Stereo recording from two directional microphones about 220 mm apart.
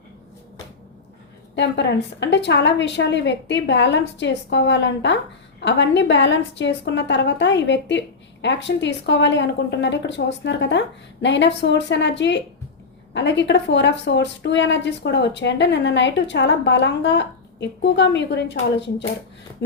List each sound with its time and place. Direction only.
1.5 s a woman's voice: 50° left (ahead or behind)